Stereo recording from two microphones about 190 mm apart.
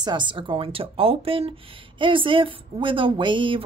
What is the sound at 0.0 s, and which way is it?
Speech, 25° right (ahead or behind).